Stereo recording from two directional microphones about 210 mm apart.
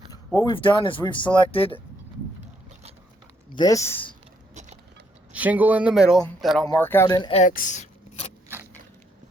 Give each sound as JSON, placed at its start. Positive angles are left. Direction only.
{"t": 0.3, "sound": "speech", "side_deg": 25}
{"t": 3.5, "sound": "speech", "side_deg": 20}
{"t": 5.3, "sound": "speech", "side_deg": -5}
{"t": 6.7, "sound": "speech", "side_deg": 10}
{"t": 7.4, "sound": "a sound", "side_deg": 40}